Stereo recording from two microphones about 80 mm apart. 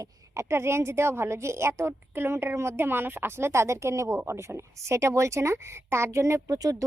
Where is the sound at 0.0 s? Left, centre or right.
Right.